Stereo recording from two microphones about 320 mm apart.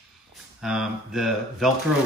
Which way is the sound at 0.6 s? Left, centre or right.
Centre.